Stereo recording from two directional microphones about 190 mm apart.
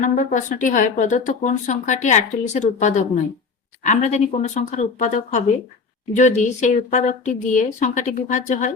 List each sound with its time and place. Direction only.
0.0 s speech: 45° left (ahead or behind)